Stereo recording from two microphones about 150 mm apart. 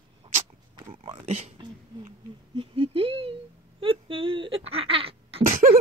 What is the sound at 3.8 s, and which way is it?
Speech, 35° right (ahead or behind).